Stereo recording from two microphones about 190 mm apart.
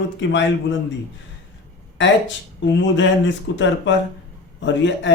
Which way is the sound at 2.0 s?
70° left (ahead or behind).